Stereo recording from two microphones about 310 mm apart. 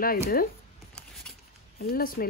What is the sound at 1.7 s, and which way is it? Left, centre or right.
Speech, left.